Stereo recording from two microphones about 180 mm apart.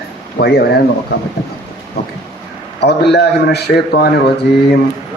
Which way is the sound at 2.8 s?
65° left (ahead or behind).